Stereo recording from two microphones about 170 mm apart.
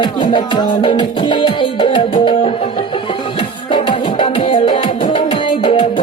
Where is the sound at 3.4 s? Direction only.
30° left (ahead or behind).